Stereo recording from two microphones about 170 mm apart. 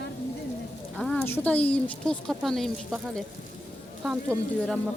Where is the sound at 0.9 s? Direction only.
5° left (ahead or behind).